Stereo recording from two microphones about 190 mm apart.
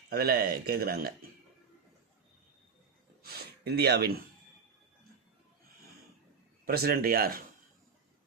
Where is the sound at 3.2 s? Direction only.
55° right (ahead or behind).